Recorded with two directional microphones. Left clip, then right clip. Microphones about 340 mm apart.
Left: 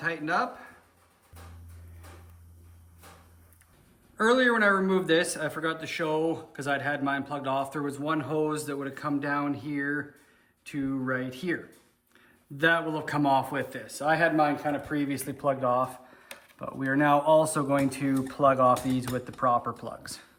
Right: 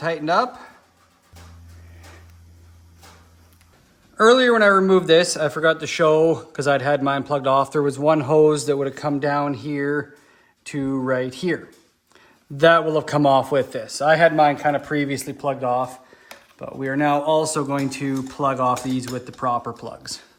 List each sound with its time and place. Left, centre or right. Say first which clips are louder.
0.0 s a man's voice: right 8 dB; centre
4.2 s a man's voice: right 9 dB; centre
15.1 s speech: right 4 dB; centre